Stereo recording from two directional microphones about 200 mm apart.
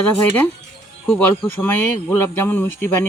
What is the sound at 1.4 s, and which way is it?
Speech, 10° left (ahead or behind).